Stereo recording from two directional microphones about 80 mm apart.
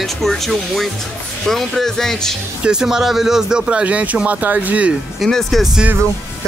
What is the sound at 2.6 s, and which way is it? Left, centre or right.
Speech, centre.